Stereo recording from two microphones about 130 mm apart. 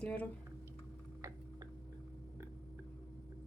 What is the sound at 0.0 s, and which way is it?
Speech, 10° left (ahead or behind).